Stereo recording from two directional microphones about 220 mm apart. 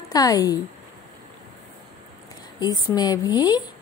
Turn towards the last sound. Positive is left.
turn(degrees=20)  # may be behind; listen again after turning